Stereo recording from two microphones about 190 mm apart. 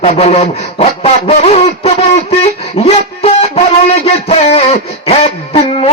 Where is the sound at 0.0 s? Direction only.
35° left (ahead or behind).